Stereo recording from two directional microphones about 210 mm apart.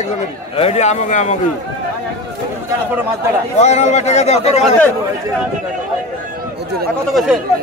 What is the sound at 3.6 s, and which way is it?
A man's voice, 30° left (ahead or behind).